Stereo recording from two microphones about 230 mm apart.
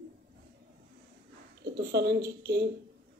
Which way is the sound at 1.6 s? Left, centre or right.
Right.